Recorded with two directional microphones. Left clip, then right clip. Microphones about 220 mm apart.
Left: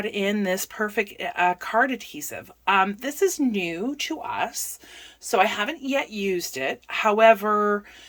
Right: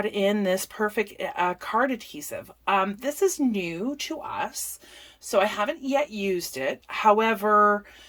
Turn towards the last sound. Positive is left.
turn(degrees=5)  # may be behind; listen again after turning